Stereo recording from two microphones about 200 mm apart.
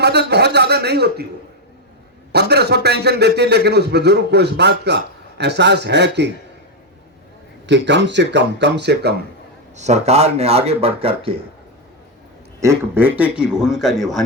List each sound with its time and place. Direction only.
0.0 s a man's voice: 55° right (ahead or behind)
2.3 s a man's voice: 55° right (ahead or behind)
7.7 s a man's voice: 60° right (ahead or behind)
9.7 s speech: 35° right (ahead or behind)
12.5 s a man's voice: 10° right (ahead or behind)